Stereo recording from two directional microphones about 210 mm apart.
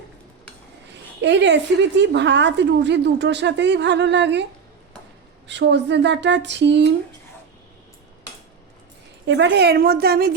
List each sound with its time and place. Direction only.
1.2 s speech: 55° right (ahead or behind)
5.5 s speech: 55° right (ahead or behind)
9.2 s a woman's voice: 55° right (ahead or behind)